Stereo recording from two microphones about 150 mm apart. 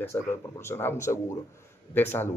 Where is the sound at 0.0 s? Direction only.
15° left (ahead or behind).